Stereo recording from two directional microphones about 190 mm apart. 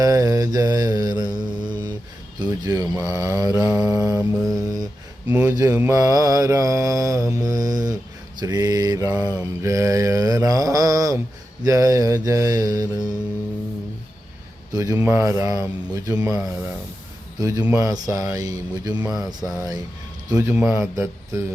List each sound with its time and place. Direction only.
0.0 s mantra: 15° right (ahead or behind)
5.3 s mantra: 10° right (ahead or behind)
14.7 s mantra: 15° right (ahead or behind)
17.4 s mantra: 15° right (ahead or behind)